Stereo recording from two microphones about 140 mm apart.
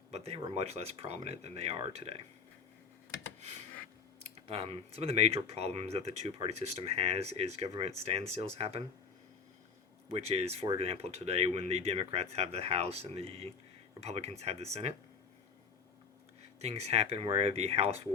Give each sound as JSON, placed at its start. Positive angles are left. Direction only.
{"t": 0.3, "sound": "speech", "side_deg": -45}
{"t": 4.2, "sound": "speech", "side_deg": -45}
{"t": 10.1, "sound": "speech", "side_deg": -50}
{"t": 16.6, "sound": "speech", "side_deg": -50}